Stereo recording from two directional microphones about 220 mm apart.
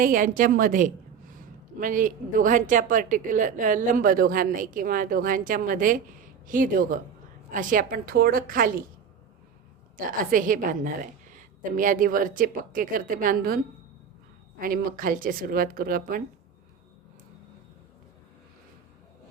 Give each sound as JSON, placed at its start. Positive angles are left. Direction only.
{"t": 0.0, "sound": "a woman's voice", "side_deg": -40}
{"t": 10.1, "sound": "a woman's voice", "side_deg": -40}
{"t": 14.6, "sound": "a woman's voice", "side_deg": -40}